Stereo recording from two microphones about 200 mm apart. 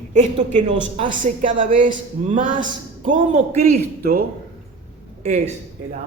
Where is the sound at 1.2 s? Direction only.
40° right (ahead or behind).